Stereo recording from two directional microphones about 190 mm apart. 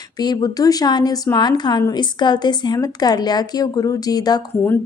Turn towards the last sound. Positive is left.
turn(degrees=20)  # may be behind; listen again after turning